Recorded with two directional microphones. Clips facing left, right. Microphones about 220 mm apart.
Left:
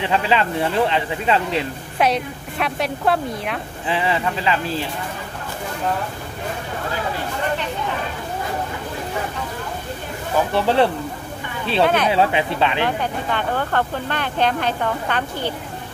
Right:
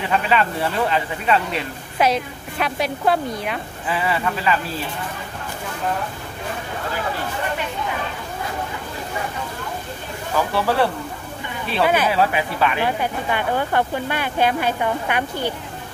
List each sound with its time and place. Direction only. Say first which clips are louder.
0.1 s speech: right 1 dB; 25° left (ahead or behind)
2.0 s a woman's voice: even; centre (ahead or behind)
3.8 s speech: left 1 dB; 25° left (ahead or behind)
10.5 s speech: left 3 dB; 20° left (ahead or behind)
11.8 s speech: left 1 dB; 5° right (ahead or behind)
12.1 s speech: left 2 dB; 25° left (ahead or behind)
12.8 s speech: even; 10° right (ahead or behind)